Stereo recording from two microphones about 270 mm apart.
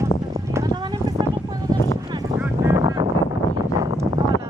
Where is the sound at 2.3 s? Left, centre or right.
Centre.